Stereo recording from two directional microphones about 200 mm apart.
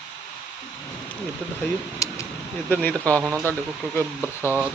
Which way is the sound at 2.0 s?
15° left (ahead or behind).